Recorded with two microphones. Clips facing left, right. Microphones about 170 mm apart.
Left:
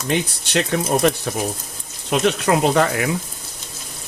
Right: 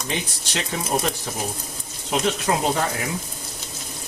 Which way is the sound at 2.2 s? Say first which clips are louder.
Left 6 dB; 70° left (ahead or behind).